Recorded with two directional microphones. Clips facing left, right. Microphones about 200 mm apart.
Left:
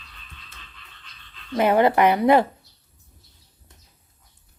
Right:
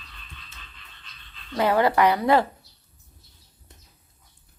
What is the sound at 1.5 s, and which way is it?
Speech, 20° left (ahead or behind).